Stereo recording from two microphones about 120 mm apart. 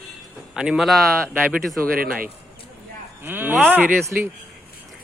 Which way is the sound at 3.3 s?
15° right (ahead or behind).